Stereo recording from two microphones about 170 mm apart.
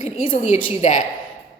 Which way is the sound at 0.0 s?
40° left (ahead or behind).